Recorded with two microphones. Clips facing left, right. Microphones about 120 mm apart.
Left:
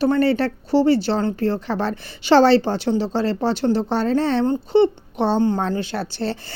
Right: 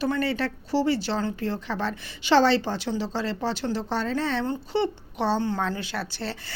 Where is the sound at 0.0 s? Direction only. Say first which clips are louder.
Left 8 dB; 35° left (ahead or behind).